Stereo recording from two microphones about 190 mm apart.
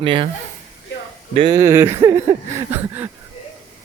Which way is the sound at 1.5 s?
15° right (ahead or behind).